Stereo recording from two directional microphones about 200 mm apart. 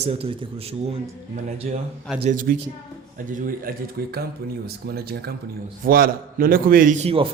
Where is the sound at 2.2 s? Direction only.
40° right (ahead or behind).